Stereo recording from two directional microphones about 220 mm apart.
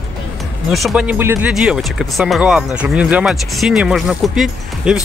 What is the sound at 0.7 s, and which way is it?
Speech, centre (ahead or behind).